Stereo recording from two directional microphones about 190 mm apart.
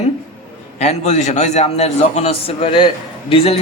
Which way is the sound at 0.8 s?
35° left (ahead or behind).